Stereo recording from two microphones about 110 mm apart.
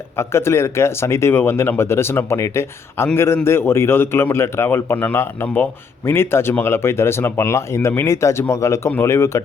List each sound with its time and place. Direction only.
0.2 s speech: 25° left (ahead or behind)